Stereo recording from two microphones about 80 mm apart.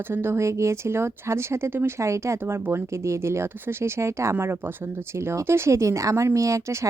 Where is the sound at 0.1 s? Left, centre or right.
Right.